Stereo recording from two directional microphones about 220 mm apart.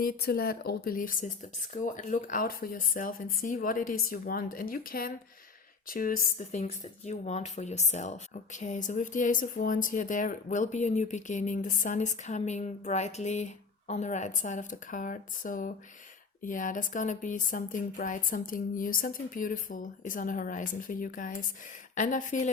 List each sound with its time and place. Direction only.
0.0 s speech: 45° left (ahead or behind)